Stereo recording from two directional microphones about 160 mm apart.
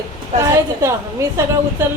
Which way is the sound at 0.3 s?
20° right (ahead or behind).